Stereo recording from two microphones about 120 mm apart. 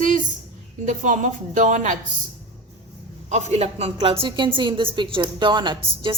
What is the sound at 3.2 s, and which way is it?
A woman's voice, 75° right (ahead or behind).